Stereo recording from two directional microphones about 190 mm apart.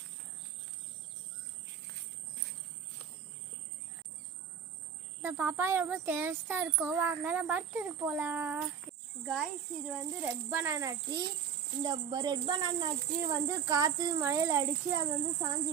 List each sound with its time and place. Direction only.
5.2 s speech: 10° right (ahead or behind)